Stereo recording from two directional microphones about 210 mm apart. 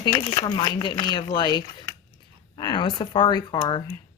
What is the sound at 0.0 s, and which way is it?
A woman's voice, 20° left (ahead or behind).